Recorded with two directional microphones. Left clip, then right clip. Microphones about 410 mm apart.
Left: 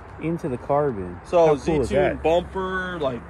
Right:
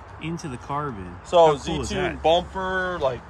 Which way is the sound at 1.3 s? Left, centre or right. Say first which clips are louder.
Right 1 dB; centre.